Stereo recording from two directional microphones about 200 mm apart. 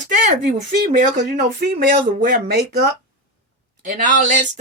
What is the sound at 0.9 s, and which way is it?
Speech, 40° right (ahead or behind).